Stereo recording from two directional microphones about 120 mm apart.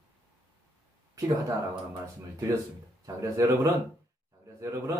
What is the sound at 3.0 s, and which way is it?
Speech, 25° right (ahead or behind).